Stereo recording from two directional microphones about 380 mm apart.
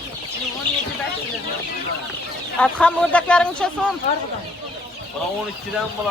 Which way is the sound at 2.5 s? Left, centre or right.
Centre.